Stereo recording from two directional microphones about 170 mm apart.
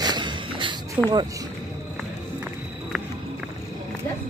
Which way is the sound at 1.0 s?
10° right (ahead or behind).